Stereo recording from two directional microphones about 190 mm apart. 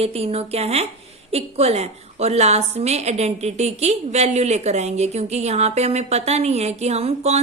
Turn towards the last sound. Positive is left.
turn(degrees=-35)  # may be behind; listen again after turning